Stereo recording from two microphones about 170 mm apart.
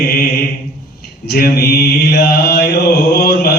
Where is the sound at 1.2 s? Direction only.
65° left (ahead or behind).